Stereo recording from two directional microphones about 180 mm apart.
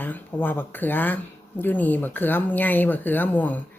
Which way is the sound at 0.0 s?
10° left (ahead or behind).